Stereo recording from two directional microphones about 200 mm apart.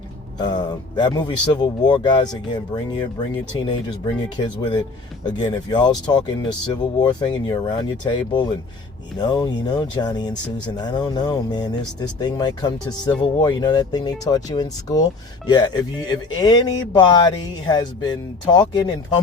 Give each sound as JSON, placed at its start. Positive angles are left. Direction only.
{"t": 0.3, "sound": "speech", "side_deg": 20}